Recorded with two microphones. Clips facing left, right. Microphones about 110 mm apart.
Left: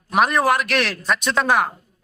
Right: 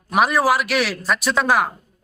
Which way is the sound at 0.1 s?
5° right (ahead or behind).